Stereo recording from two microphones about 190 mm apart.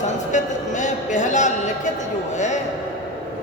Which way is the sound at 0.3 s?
40° left (ahead or behind).